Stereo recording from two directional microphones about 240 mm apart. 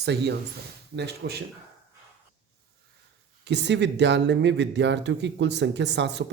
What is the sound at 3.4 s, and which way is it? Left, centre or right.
Speech, right.